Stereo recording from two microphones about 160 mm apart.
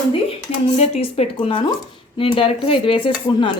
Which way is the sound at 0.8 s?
40° left (ahead or behind).